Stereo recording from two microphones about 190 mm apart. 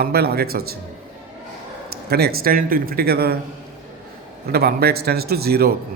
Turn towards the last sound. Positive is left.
turn(degrees=-55)  # may be behind; listen again after turning